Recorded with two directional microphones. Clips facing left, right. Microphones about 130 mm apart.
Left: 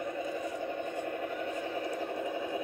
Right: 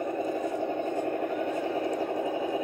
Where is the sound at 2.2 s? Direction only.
20° right (ahead or behind).